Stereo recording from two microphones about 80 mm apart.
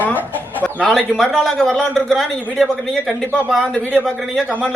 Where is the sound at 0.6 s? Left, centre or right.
Centre.